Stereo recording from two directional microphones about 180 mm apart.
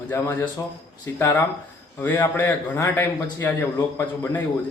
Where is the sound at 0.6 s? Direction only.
20° left (ahead or behind).